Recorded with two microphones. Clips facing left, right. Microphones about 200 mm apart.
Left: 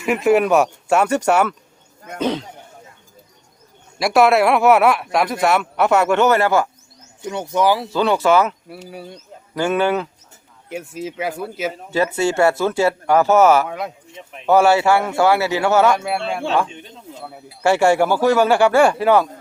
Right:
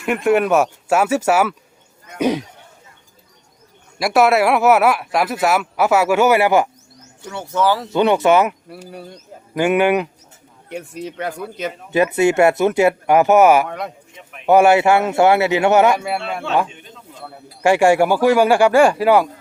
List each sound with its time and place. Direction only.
0.0 s speech: centre (ahead or behind)
3.9 s speech: centre (ahead or behind)
7.2 s speech: 15° left (ahead or behind)
7.9 s a man's voice: 20° right (ahead or behind)
9.6 s speech: 15° right (ahead or behind)
10.7 s speech: centre (ahead or behind)
11.9 s speech: 20° right (ahead or behind)
13.7 s speech: centre (ahead or behind)
14.4 s a man's voice: 15° right (ahead or behind)
16.0 s speech: centre (ahead or behind)
17.6 s speech: 15° right (ahead or behind)